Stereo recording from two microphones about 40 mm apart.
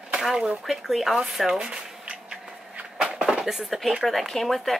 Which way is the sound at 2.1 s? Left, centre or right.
Right.